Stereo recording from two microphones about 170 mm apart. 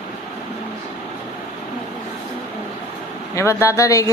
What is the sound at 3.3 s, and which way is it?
Speech, 15° left (ahead or behind).